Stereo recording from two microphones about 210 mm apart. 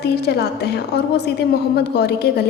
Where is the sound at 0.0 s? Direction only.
50° left (ahead or behind).